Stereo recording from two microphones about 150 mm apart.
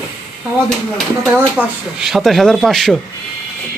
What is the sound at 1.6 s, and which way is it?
Speech, 10° right (ahead or behind).